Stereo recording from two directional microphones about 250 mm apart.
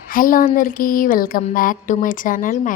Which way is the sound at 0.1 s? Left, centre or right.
Left.